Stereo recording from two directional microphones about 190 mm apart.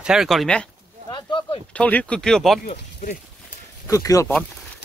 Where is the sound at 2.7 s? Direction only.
40° left (ahead or behind).